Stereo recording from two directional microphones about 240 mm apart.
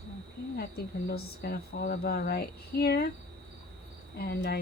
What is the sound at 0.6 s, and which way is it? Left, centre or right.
Speech, left.